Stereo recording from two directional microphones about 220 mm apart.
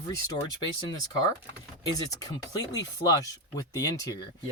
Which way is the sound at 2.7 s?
15° left (ahead or behind).